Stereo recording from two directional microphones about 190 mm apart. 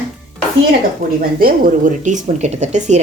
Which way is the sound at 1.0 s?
50° right (ahead or behind).